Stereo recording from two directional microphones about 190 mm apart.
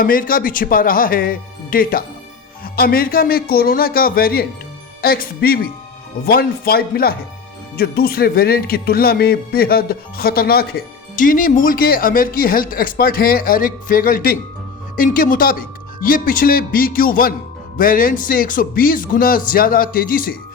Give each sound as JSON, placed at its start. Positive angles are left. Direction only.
{"t": 0.0, "sound": "speech", "side_deg": 50}